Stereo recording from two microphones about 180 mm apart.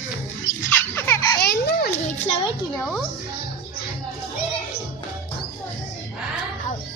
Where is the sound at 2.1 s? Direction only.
30° left (ahead or behind).